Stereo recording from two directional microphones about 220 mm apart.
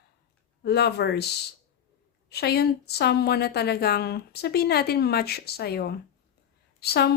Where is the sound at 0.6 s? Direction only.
50° left (ahead or behind).